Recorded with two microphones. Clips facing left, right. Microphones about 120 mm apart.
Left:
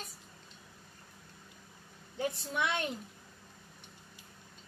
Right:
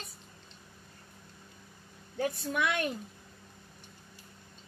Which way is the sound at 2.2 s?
25° left (ahead or behind).